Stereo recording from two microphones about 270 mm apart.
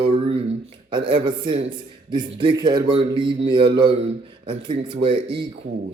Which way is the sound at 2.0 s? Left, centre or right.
Centre.